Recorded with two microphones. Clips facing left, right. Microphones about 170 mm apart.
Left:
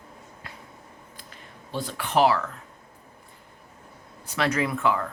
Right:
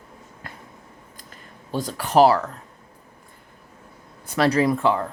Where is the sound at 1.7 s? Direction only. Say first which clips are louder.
Right 6 dB; 40° right (ahead or behind).